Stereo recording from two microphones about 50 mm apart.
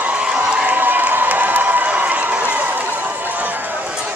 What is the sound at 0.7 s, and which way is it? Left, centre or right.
Crowd, right.